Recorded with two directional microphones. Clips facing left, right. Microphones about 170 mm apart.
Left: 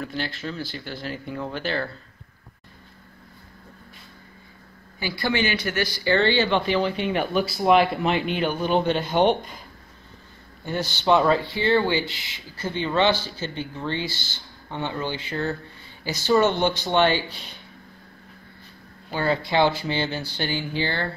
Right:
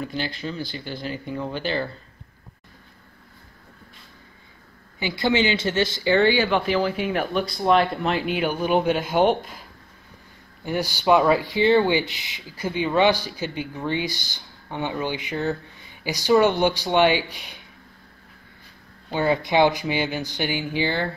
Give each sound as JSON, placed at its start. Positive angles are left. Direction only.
{"t": 0.0, "sound": "speech", "side_deg": 0}
{"t": 4.9, "sound": "speech", "side_deg": -20}
{"t": 10.6, "sound": "speech", "side_deg": -15}
{"t": 19.1, "sound": "speech", "side_deg": -20}